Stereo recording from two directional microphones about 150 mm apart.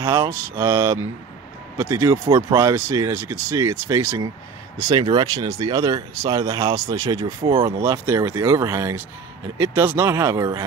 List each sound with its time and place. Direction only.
0.0 s speech: 20° right (ahead or behind)